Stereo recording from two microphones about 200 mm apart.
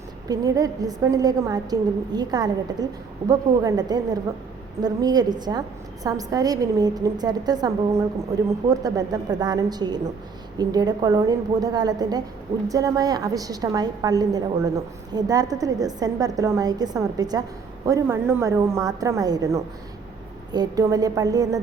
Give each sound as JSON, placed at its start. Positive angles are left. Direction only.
{"t": 0.3, "sound": "a woman's voice", "side_deg": -15}